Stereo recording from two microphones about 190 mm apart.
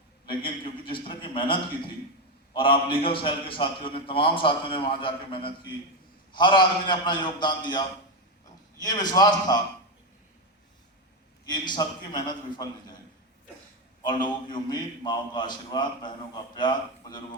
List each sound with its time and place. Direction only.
0.3 s a man's voice: 25° left (ahead or behind)
11.4 s a man's voice: 25° left (ahead or behind)
14.0 s a man's voice: 25° left (ahead or behind)